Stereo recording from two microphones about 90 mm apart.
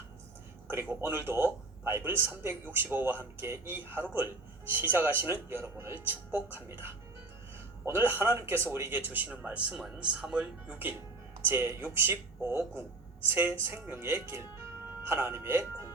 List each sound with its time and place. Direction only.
0.7 s a man's voice: 25° right (ahead or behind)
7.9 s a man's voice: 25° right (ahead or behind)
11.4 s a man's voice: 30° right (ahead or behind)